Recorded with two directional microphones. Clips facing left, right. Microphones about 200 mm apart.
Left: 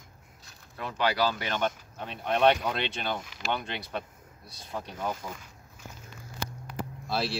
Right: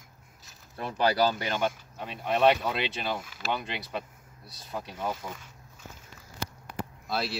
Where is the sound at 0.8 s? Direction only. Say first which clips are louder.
Right 2 dB; 35° right (ahead or behind).